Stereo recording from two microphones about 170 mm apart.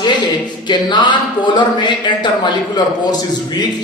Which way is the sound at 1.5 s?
25° left (ahead or behind).